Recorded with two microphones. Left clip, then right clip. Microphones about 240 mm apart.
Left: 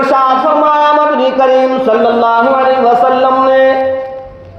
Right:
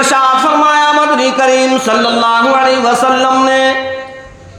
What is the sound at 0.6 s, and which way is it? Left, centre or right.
Music, right.